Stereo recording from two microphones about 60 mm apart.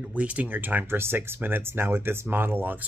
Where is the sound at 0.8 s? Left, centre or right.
Right.